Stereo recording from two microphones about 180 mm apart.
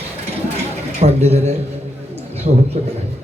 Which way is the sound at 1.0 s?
35° right (ahead or behind).